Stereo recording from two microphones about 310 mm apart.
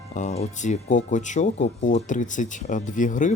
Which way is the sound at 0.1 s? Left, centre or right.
Left.